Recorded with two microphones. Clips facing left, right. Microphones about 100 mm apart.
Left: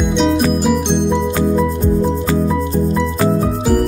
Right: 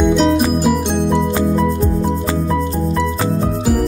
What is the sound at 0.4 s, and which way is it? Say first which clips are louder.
Music: even; centre (ahead or behind).